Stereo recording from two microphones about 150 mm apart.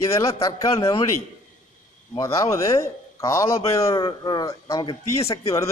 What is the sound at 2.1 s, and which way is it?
Speech, 20° left (ahead or behind).